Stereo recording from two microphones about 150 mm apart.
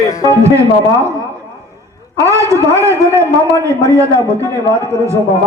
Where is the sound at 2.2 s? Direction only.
20° right (ahead or behind).